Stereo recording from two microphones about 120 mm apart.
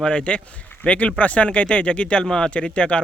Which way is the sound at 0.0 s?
10° left (ahead or behind).